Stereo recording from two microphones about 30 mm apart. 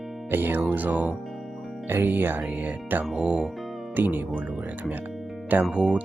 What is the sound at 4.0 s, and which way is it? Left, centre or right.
Speech, right.